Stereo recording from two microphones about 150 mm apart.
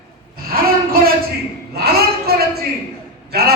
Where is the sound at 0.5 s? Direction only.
80° right.